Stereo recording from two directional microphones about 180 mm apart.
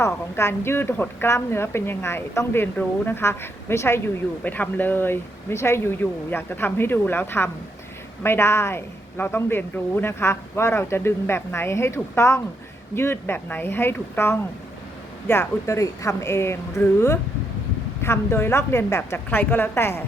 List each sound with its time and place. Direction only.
0.0 s a woman's voice: 15° left (ahead or behind)